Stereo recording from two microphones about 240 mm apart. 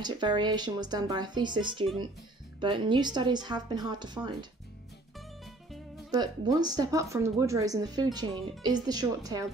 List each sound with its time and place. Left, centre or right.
0.0 s speech: centre
6.1 s speech: centre